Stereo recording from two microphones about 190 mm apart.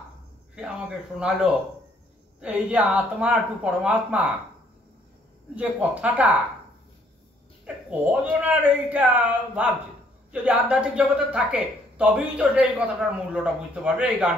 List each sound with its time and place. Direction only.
0.6 s speech: 5° right (ahead or behind)
5.5 s speech: 5° right (ahead or behind)
7.7 s a sound: 10° right (ahead or behind)
8.2 s speech: 5° right (ahead or behind)